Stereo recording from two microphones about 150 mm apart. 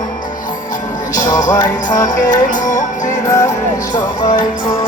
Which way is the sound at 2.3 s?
55° left (ahead or behind).